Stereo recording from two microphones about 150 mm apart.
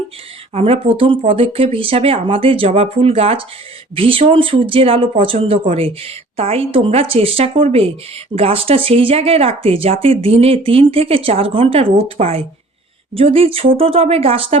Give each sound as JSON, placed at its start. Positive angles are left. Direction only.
{"t": 0.5, "sound": "speech", "side_deg": -40}